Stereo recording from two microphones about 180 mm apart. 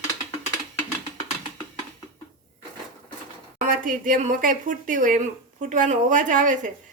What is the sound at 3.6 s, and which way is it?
Speech, 50° right (ahead or behind).